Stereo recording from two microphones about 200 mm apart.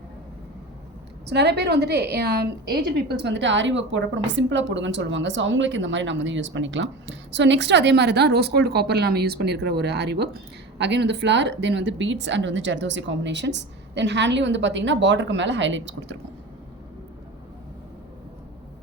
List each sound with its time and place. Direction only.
1.3 s a woman's voice: 55° right (ahead or behind)